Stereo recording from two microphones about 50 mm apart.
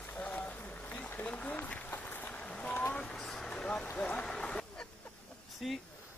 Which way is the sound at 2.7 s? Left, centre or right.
Left.